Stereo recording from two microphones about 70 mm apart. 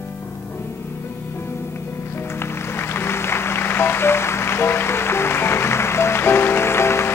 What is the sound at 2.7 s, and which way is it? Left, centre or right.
Music, left.